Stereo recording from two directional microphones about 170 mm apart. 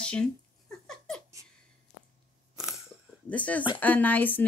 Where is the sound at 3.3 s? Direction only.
10° left (ahead or behind).